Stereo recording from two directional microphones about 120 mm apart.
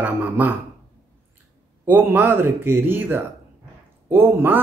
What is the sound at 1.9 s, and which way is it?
Speech, 15° right (ahead or behind).